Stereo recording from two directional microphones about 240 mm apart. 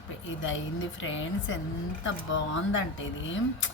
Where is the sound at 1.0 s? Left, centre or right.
Left.